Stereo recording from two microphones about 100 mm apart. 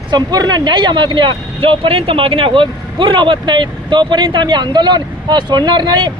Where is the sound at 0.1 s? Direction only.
45° right (ahead or behind).